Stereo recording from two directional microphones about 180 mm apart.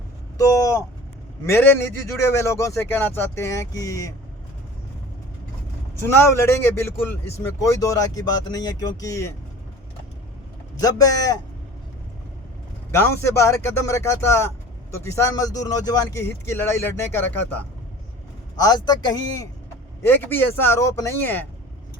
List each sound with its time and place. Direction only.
0.3 s vehicle: 20° left (ahead or behind)
1.5 s speech: 15° left (ahead or behind)
6.1 s speech: 15° left (ahead or behind)
10.8 s speech: 20° left (ahead or behind)
12.9 s speech: 15° left (ahead or behind)
20.0 s speech: 10° left (ahead or behind)